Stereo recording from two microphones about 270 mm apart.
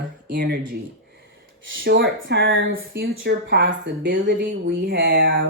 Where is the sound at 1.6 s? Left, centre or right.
Right.